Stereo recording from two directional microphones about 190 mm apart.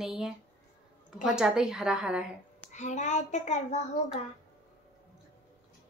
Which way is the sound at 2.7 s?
40° left (ahead or behind).